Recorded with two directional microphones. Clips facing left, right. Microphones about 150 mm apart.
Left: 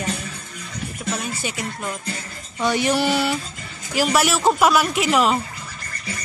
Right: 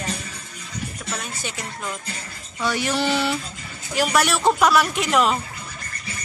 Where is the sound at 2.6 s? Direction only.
20° left (ahead or behind); by 5.4 s 5° left (ahead or behind).